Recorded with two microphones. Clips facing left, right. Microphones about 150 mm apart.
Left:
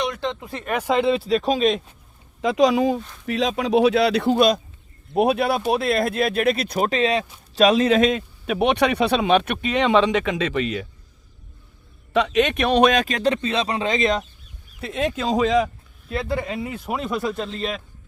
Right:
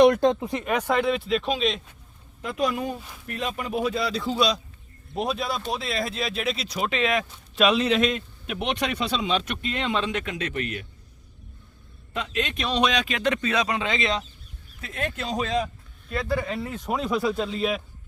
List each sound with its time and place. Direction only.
0.0 s speech: 45° right (ahead or behind)
0.3 s speech: 20° right (ahead or behind)
0.6 s speech: 5° left (ahead or behind)
0.9 s speech: 30° left (ahead or behind); by 1.8 s 45° left (ahead or behind)
2.4 s speech: 90° left; by 8.1 s 45° left (ahead or behind)
8.5 s speech: 65° left (ahead or behind); by 10.7 s 90° left
12.1 s speech: 80° left; by 14.3 s 45° left (ahead or behind)
14.8 s speech: 80° left
16.1 s speech: 25° left (ahead or behind)
16.5 s speech: 10° left (ahead or behind)